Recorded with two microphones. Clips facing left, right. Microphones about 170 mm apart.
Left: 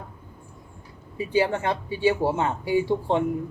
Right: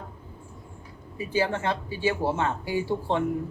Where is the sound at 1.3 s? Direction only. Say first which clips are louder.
Left 3 dB; 15° left (ahead or behind).